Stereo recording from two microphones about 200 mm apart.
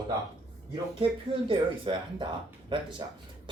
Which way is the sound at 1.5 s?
25° right (ahead or behind).